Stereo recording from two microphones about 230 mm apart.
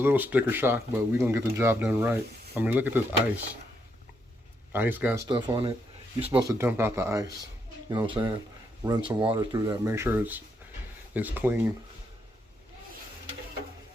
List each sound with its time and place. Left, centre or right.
0.0 s speech: centre
4.7 s speech: centre
5.3 s speech: centre
6.3 s speech: centre